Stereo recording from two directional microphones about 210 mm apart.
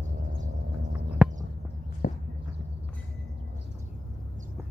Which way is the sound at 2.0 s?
40° left (ahead or behind).